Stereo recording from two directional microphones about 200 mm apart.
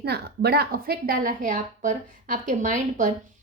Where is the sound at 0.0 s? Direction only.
55° right (ahead or behind).